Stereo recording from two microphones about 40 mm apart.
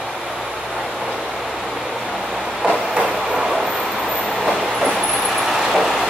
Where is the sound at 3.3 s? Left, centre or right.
Centre.